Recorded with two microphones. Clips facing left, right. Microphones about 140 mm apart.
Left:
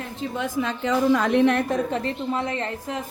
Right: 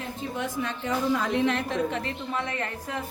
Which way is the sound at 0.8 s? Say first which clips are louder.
Left 6 dB; 75° left (ahead or behind).